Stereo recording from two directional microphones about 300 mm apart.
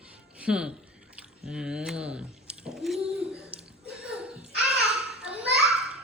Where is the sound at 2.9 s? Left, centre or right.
Centre.